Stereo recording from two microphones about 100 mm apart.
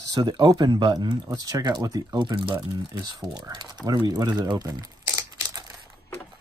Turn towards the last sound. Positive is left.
turn(degrees=-40)  # may be behind; listen again after turning